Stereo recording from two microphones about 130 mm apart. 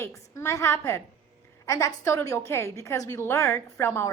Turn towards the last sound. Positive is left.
turn(degrees=20)  # may be behind; listen again after turning